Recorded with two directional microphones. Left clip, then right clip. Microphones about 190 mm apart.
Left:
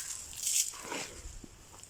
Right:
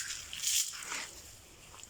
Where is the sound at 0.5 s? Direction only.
65° left (ahead or behind).